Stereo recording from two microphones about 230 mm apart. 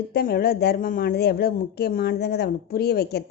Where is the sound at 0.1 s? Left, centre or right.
Left.